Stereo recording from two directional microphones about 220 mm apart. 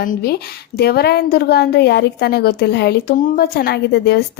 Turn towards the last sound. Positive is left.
turn(degrees=45)  # may be behind; listen again after turning